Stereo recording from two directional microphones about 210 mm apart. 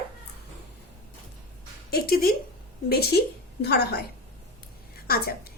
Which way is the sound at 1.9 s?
45° left (ahead or behind).